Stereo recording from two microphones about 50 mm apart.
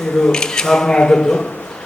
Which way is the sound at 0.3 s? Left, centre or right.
Centre.